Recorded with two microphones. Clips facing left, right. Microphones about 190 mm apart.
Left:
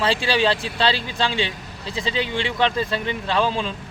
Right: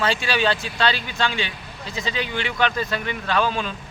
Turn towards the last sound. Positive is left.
turn(degrees=30)  # may be behind; listen again after turning